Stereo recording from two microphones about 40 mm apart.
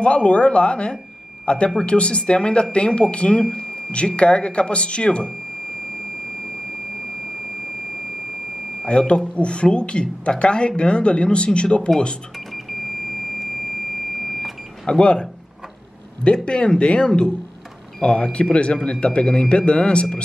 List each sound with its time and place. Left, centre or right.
0.0 s speech: left
8.8 s speech: left
14.2 s vehicle: centre
14.9 s speech: left
16.4 s speech: left